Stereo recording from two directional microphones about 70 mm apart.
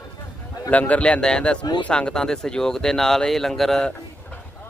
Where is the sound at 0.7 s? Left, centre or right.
Centre.